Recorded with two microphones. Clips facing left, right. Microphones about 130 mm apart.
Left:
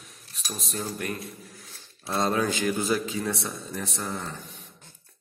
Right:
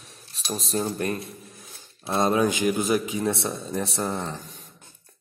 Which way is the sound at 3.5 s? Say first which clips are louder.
Right 6 dB; 30° right (ahead or behind).